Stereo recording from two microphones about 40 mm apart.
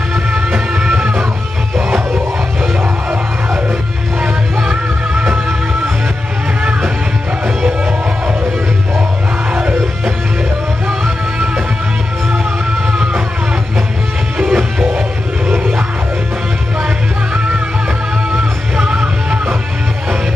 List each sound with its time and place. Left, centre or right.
1.8 s music: right
4.2 s music: right
10.9 s music: right
12.9 s music: right
14.5 s music: centre
14.9 s music: right
18.3 s music: right